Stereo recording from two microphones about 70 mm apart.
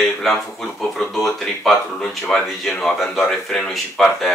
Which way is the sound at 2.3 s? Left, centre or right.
Centre.